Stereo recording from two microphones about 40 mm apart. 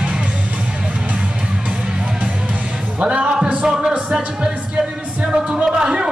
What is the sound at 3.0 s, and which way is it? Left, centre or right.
Speech, right.